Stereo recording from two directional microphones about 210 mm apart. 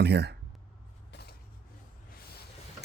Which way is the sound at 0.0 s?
50° right (ahead or behind).